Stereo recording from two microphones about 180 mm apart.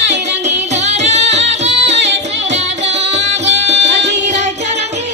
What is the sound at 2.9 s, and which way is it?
Music, 35° right (ahead or behind).